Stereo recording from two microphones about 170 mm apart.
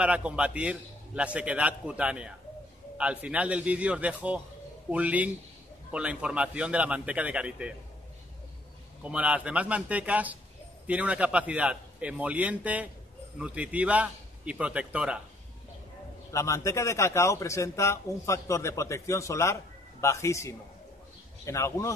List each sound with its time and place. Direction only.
0.0 s a man's voice: 5° right (ahead or behind)
9.0 s a man's voice: 10° right (ahead or behind)
16.3 s a man's voice: 15° left (ahead or behind)